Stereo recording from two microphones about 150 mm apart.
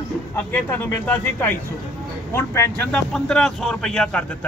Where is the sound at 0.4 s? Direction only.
10° left (ahead or behind).